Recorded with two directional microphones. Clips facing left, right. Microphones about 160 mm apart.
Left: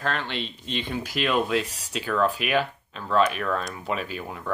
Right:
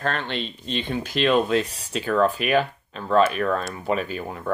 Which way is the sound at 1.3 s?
5° left (ahead or behind).